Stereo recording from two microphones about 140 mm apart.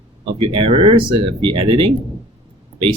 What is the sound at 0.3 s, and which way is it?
Speech, 40° right (ahead or behind).